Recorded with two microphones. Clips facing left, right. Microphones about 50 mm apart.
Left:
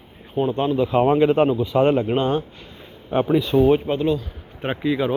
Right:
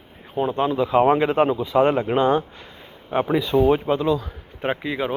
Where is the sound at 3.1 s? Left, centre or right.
Right.